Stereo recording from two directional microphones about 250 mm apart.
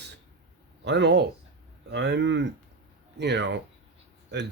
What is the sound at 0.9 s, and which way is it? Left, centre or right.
Speech, right.